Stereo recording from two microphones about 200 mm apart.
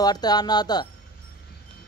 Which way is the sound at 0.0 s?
20° left (ahead or behind).